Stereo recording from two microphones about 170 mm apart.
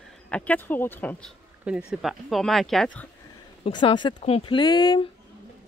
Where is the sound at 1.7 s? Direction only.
5° right (ahead or behind).